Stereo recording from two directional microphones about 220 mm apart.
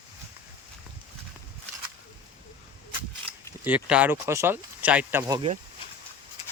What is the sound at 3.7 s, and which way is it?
Speech, 5° right (ahead or behind).